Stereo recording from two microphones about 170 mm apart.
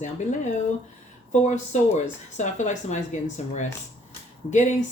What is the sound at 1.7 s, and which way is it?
Speech, 45° left (ahead or behind).